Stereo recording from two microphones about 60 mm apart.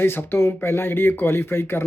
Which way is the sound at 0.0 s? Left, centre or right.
Left.